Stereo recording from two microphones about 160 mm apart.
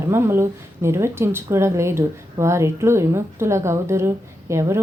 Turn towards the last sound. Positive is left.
turn(degrees=-20)  # may be behind; listen again after turning